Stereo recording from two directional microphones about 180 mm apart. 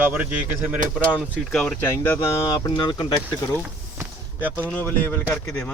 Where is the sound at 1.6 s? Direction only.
10° left (ahead or behind).